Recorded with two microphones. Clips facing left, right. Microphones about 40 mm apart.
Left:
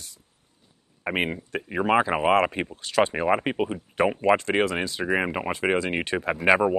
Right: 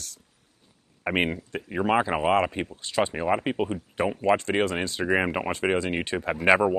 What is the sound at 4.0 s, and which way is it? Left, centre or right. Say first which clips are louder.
Speech: left 3 dB; left.